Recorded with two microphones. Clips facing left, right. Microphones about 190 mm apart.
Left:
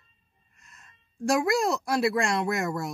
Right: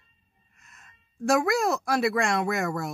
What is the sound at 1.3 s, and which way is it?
Speech, centre (ahead or behind).